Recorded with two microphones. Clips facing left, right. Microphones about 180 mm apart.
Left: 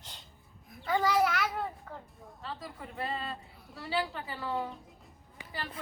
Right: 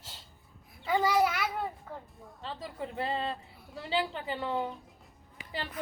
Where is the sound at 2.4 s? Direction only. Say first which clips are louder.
Right 4 dB; 25° right (ahead or behind).